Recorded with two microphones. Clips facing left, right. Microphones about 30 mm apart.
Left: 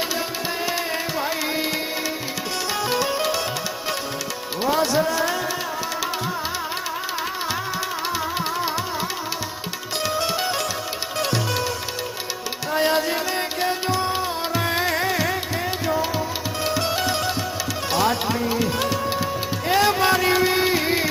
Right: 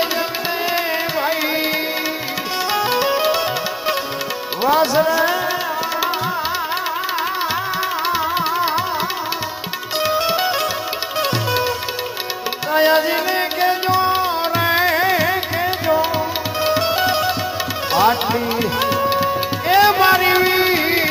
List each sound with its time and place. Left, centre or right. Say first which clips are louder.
1.2 s tabla: right 6 dB; right
2.7 s music: right 5 dB; right
4.6 s speech: right 5 dB; right
8.0 s music: right 7 dB; right
10.0 s music: right 6 dB; right
12.7 s music: right 6 dB; right